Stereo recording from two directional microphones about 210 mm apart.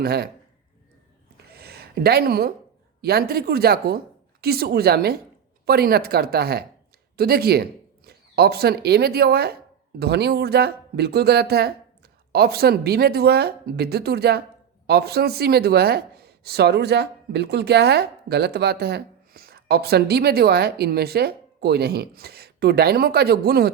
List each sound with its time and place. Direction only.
0.0 s speech: 45° right (ahead or behind)
1.4 s a sound: 50° right (ahead or behind)
3.0 s speech: 50° right (ahead or behind)